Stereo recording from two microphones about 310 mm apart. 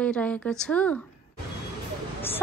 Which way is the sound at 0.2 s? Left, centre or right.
Centre.